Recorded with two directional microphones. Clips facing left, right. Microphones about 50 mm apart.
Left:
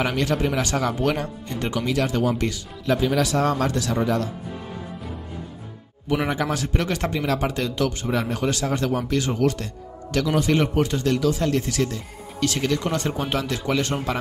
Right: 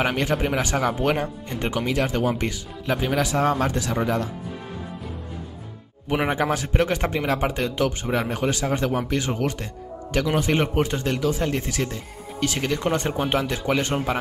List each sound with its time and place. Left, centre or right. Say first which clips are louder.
0.0 s speech: even; right
6.0 s speech: right 1 dB; right